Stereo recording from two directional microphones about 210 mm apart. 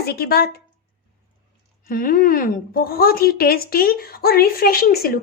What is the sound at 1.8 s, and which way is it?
A woman's voice, 40° left (ahead or behind).